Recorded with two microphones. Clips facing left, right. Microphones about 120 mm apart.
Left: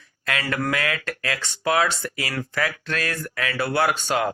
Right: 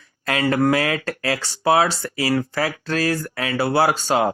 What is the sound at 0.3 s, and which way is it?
Speech, 30° right (ahead or behind).